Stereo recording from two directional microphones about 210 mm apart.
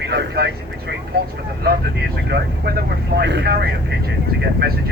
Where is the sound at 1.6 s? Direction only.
50° right (ahead or behind).